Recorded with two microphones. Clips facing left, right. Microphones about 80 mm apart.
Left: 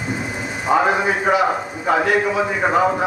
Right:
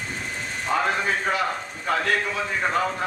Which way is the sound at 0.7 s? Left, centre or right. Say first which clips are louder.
Left 7 dB; centre.